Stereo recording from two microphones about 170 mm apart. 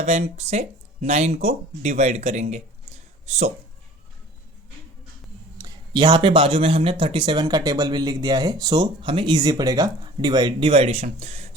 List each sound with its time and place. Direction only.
0.0 s speech: 40° right (ahead or behind)
5.5 s speech: 20° right (ahead or behind); by 11.4 s 40° right (ahead or behind)